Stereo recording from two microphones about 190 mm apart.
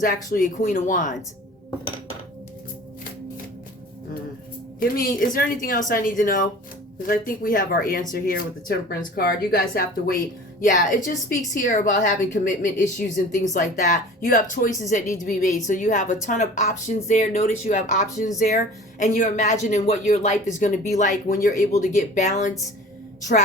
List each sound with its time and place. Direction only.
0.0 s speech: 45° left (ahead or behind)
4.8 s speech: 50° left (ahead or behind)
10.6 s speech: 40° left (ahead or behind)